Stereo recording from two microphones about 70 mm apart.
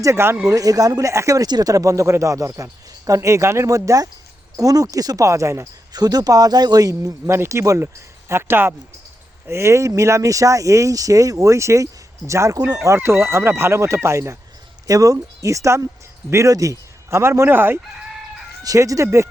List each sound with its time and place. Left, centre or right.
0.0 s speech: right
0.4 s speech: right
1.5 s speech: right
1.7 s speech: right
5.9 s speech: right
7.3 s speech: right
8.3 s speech: right
12.5 s speech: right
12.8 s speech: right
14.8 s speech: right
18.6 s speech: right